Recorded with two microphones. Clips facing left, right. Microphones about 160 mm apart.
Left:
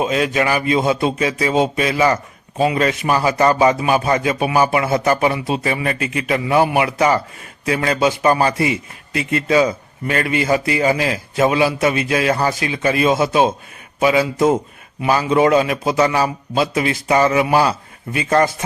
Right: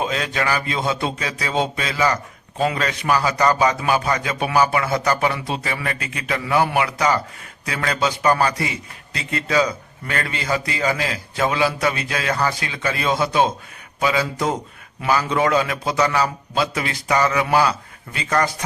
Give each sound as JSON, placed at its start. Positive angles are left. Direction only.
{"t": 0.0, "sound": "a man's voice", "side_deg": 20}